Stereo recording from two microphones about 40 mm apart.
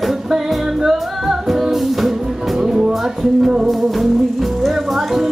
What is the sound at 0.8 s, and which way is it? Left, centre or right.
Music, centre.